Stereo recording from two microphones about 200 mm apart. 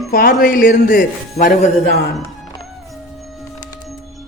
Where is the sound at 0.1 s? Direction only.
45° left (ahead or behind).